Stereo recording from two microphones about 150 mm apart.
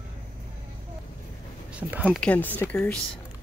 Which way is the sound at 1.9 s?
10° right (ahead or behind).